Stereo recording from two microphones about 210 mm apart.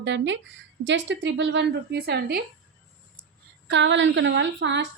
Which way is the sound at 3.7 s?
60° right (ahead or behind).